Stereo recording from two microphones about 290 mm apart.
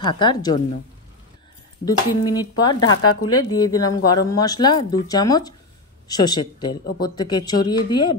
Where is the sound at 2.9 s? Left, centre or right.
Left.